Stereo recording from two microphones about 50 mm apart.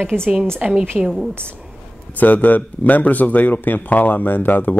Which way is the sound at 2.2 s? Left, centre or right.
Left.